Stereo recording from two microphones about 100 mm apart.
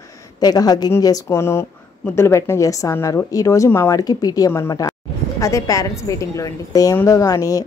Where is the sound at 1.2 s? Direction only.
25° left (ahead or behind).